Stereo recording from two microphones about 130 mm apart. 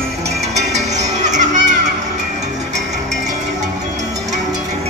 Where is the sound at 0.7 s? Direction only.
65° right (ahead or behind).